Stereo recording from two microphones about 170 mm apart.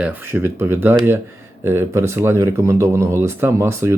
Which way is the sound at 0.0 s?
10° right (ahead or behind).